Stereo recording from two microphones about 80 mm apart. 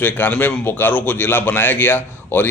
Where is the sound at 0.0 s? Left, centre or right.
Left.